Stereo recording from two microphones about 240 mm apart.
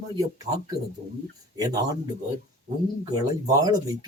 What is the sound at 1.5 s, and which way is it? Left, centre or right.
Speech, centre.